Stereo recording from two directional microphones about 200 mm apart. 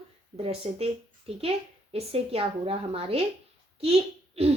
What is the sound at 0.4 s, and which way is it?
A child's voice, 30° right (ahead or behind).